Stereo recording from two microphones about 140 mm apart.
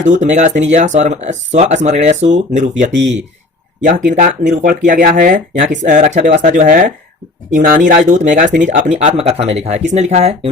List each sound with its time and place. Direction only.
0.0 s speech: 60° right (ahead or behind); by 4.8 s 80° right
4.9 s speech: 70° right (ahead or behind)
7.5 s speech: 80° right; by 10.5 s 50° right (ahead or behind)